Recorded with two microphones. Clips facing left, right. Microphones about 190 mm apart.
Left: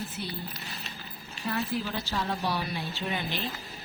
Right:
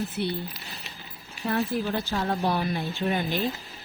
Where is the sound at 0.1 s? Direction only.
65° right (ahead or behind).